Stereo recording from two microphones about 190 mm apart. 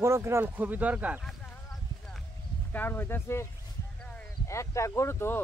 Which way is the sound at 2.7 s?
10° left (ahead or behind).